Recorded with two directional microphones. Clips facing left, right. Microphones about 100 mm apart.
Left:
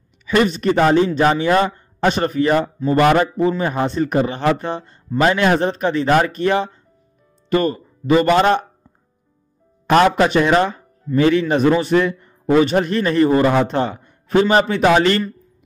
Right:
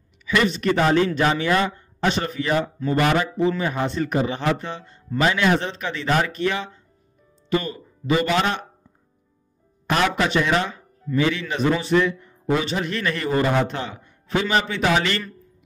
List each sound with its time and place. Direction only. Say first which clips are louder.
0.2 s speech: left 4 dB; 40° left (ahead or behind)
0.9 s a man's voice: left 4 dB; 25° left (ahead or behind)
1.2 s a man's voice: left 5 dB; 35° left (ahead or behind)
2.0 s speech: left 6 dB; 50° left (ahead or behind)
9.8 s speech: left 8 dB; 40° left (ahead or behind)
12.9 s a man's voice: left 6 dB; 35° left (ahead or behind)